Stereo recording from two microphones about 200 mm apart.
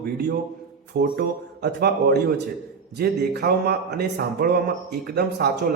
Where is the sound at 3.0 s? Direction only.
50° right (ahead or behind).